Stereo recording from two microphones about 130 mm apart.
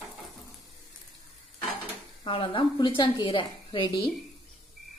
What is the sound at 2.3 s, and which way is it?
A woman's voice, 45° left (ahead or behind).